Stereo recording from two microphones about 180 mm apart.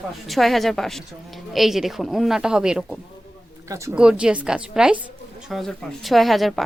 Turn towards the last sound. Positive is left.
turn(degrees=0)  # may be behind; listen again after turning